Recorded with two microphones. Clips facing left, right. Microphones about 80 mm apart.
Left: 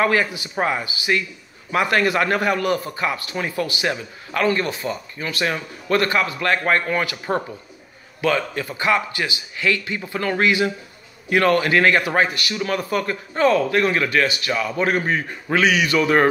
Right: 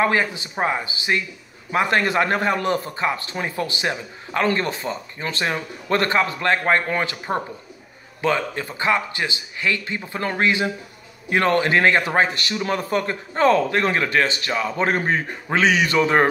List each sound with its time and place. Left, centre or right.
0.0 s a man's voice: right
4.5 s a man's voice: right
8.2 s a man's voice: right